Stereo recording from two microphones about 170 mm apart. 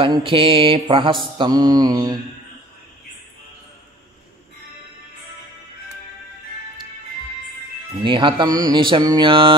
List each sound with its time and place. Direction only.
0.0 s mantra: 30° right (ahead or behind)
1.2 s speech: 25° right (ahead or behind)
8.0 s speech: 30° right (ahead or behind)